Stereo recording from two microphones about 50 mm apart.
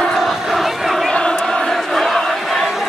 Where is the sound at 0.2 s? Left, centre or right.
Centre.